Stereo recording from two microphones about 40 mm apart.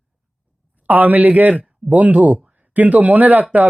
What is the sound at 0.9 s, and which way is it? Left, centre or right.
Speech, right.